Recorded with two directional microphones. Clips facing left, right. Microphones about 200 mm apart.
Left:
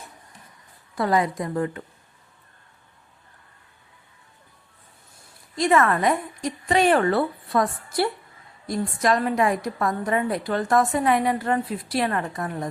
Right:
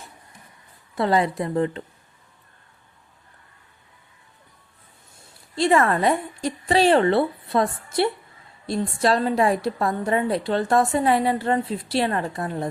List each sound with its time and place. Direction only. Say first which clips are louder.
0.9 s a woman's voice: right 1 dB; 25° right (ahead or behind)
5.5 s a woman's voice: right 1 dB; 30° right (ahead or behind)